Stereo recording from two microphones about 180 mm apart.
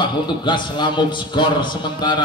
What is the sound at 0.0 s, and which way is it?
A man's voice, 25° left (ahead or behind).